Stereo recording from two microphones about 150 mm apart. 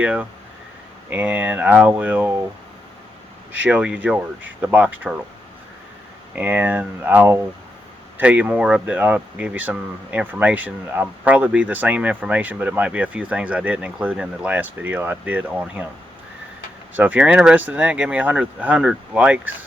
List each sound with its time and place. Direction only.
0.0 s speech: 10° right (ahead or behind)
3.6 s speech: 10° right (ahead or behind)
6.3 s speech: 10° right (ahead or behind)
16.9 s speech: 10° right (ahead or behind)